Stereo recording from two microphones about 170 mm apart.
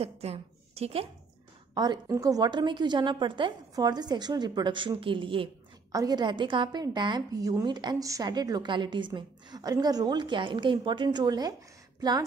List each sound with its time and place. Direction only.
0.0 s speech: 35° right (ahead or behind)
1.7 s a woman's voice: 25° right (ahead or behind)